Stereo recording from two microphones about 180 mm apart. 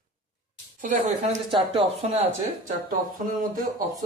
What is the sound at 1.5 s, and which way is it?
Speech, 30° right (ahead or behind).